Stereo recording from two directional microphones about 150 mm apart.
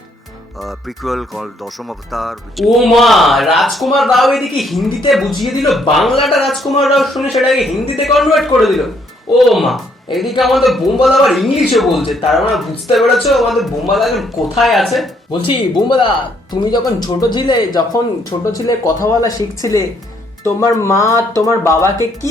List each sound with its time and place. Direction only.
0.6 s speech: centre (ahead or behind)
15.3 s speech: 35° left (ahead or behind); by 21.8 s 15° left (ahead or behind)